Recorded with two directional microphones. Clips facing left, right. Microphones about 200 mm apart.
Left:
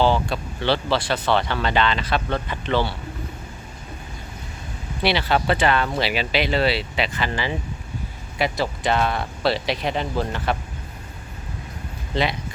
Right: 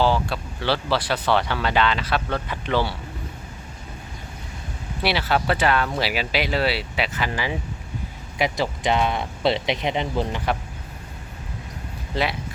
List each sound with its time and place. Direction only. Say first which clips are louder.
0.0 s speech: left 1 dB; 5° right (ahead or behind)
5.0 s speech: left 2 dB; 5° right (ahead or behind)
12.1 s speech: left 2 dB; 5° right (ahead or behind)